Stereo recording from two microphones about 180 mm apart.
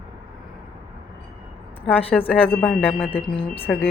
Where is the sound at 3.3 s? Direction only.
30° left (ahead or behind).